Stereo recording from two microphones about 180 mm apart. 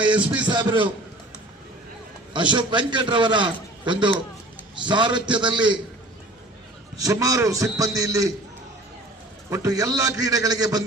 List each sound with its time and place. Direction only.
0.4 s a man's voice: 25° right (ahead or behind)
2.3 s a man's voice: 25° right (ahead or behind)
6.9 s a man's voice: 20° right (ahead or behind)
9.5 s a man's voice: 20° right (ahead or behind)